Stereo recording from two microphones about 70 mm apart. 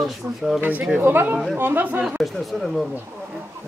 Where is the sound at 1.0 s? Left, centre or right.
Right.